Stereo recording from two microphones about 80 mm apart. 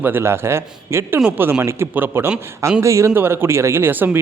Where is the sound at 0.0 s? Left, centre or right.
Right.